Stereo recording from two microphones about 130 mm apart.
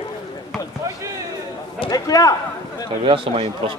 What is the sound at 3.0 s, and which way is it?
Speech, 40° right (ahead or behind).